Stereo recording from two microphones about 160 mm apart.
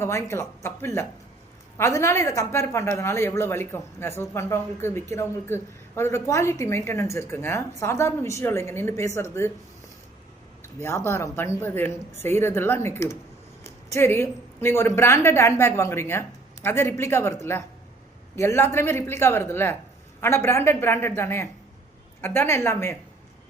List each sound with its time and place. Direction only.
0.0 s a woman's voice: 15° left (ahead or behind)
10.6 s a woman's voice: 15° left (ahead or behind)
18.3 s a woman's voice: 15° left (ahead or behind)